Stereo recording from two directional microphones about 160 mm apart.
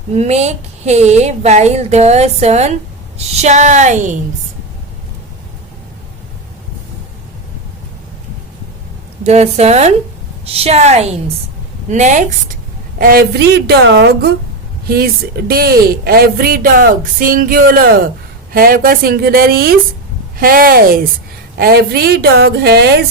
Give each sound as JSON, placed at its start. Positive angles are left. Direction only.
{"t": 0.1, "sound": "a woman's voice", "side_deg": -40}
{"t": 9.2, "sound": "a woman's voice", "side_deg": -45}
{"t": 13.0, "sound": "a woman's voice", "side_deg": -70}
{"t": 14.8, "sound": "a woman's voice", "side_deg": -75}